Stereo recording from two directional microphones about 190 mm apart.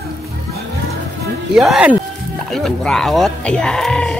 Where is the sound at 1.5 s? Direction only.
5° right (ahead or behind).